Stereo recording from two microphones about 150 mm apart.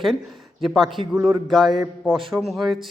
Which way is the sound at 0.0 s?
Centre (ahead or behind).